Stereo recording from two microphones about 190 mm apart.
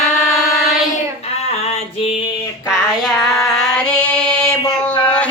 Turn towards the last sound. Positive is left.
turn(degrees=5)  # may be behind; listen again after turning